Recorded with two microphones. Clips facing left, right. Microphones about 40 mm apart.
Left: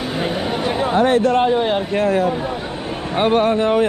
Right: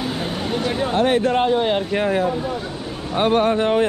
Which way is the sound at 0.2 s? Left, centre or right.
Centre.